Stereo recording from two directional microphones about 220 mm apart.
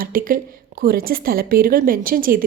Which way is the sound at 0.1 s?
40° right (ahead or behind).